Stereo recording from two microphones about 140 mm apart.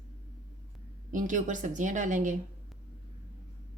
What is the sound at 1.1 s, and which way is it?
A woman's voice, 70° right (ahead or behind).